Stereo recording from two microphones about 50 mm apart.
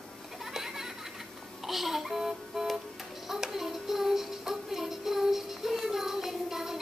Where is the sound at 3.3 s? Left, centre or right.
Centre.